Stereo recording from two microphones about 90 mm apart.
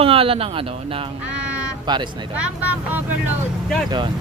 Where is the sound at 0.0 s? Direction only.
90° right.